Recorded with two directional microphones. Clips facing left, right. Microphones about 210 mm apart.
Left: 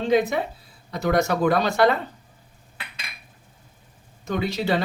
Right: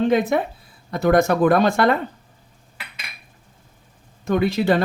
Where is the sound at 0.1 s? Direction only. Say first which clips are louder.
Right 2 dB; 55° right (ahead or behind).